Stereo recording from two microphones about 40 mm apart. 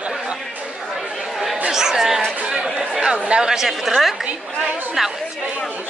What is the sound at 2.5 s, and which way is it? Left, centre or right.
Chatter, centre.